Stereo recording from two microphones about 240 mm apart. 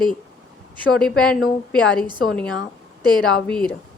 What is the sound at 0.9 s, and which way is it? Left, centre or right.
A woman's voice, centre.